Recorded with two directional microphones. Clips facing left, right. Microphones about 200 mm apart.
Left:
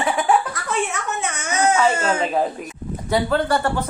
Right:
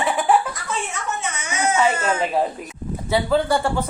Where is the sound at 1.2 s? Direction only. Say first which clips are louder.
Left 5 dB; 55° left (ahead or behind).